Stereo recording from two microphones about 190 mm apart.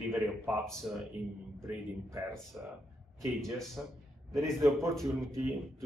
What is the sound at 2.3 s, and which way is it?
A man's voice, centre (ahead or behind).